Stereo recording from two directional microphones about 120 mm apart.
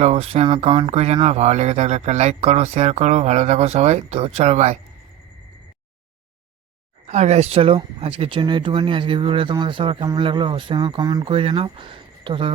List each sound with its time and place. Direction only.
0.0 s speech: 55° right (ahead or behind)
7.1 s speech: 70° right (ahead or behind); by 11.3 s 35° right (ahead or behind)
11.3 s speech: 50° right (ahead or behind)